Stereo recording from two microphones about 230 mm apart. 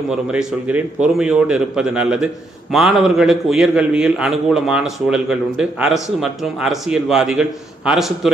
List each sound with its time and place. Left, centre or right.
0.1 s a man's voice: centre